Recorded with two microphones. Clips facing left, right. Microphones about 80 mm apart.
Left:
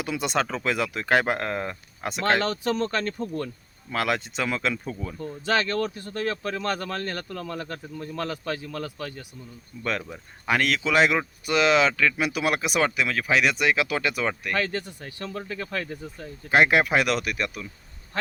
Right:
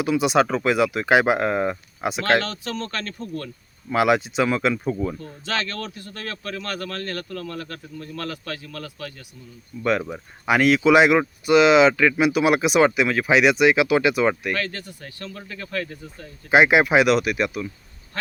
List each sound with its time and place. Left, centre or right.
0.0 s speech: centre
2.4 s speech: centre
3.9 s speech: centre
5.5 s speech: centre
10.0 s speech: centre
14.5 s speech: centre
16.5 s speech: centre